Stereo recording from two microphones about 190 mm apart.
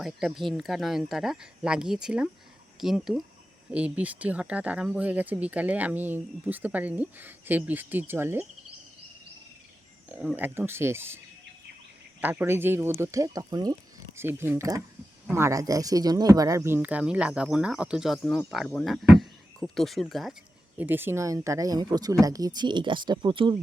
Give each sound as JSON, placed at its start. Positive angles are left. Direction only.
{"t": 0.0, "sound": "speech", "side_deg": 0}
{"t": 10.1, "sound": "speech", "side_deg": -10}
{"t": 12.2, "sound": "speech", "side_deg": -10}
{"t": 20.7, "sound": "speech", "side_deg": -10}